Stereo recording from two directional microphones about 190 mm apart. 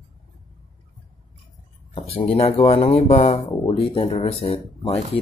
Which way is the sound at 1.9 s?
30° left (ahead or behind).